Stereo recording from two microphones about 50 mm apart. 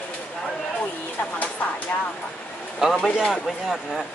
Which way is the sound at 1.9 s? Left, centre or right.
Left.